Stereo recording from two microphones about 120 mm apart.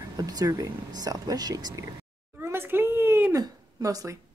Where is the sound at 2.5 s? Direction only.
20° right (ahead or behind).